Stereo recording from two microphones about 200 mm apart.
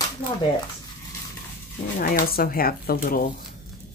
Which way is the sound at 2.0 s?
45° left (ahead or behind).